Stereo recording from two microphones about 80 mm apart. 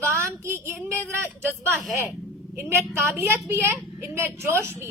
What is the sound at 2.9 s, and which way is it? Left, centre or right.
A woman's voice, right.